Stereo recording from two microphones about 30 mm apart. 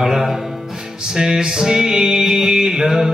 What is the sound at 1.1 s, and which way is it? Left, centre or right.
Music, right.